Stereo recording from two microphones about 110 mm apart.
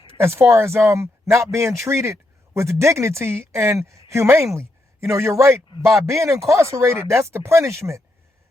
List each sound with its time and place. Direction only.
0.2 s speech: 25° right (ahead or behind)
4.5 s a sound: 25° right (ahead or behind)
5.2 s speech: 25° right (ahead or behind)